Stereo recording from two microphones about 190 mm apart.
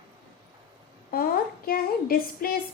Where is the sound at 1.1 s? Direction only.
50° left (ahead or behind).